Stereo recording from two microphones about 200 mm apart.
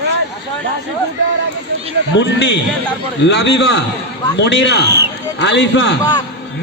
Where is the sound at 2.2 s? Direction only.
60° left (ahead or behind).